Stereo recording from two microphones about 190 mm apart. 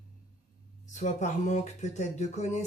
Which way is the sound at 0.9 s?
40° left (ahead or behind).